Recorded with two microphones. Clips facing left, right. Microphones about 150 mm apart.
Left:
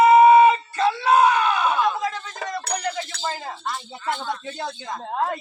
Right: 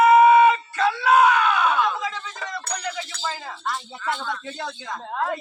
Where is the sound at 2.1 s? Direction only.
45° left (ahead or behind).